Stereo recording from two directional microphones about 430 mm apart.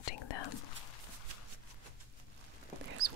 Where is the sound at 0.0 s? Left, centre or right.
Left.